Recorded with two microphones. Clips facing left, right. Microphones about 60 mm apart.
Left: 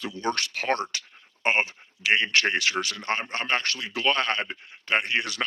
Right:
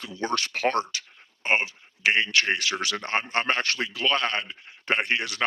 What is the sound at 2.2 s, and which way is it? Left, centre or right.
Speech, left.